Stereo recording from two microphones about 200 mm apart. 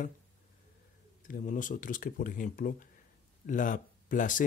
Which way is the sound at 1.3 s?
40° left (ahead or behind).